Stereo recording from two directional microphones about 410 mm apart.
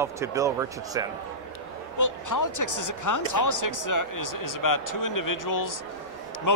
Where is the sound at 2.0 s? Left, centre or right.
Left.